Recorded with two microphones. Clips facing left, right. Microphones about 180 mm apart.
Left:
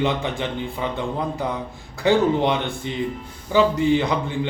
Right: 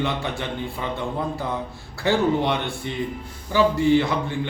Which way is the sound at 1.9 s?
15° left (ahead or behind).